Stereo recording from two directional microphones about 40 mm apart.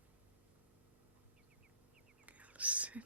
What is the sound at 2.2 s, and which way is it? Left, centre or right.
Whispering, right.